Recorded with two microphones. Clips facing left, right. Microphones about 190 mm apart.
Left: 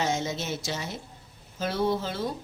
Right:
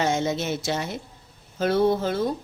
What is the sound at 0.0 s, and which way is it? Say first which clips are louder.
Speech: right 5 dB; 60° right (ahead or behind).